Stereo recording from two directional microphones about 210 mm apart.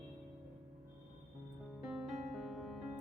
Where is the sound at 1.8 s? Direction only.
Centre (ahead or behind).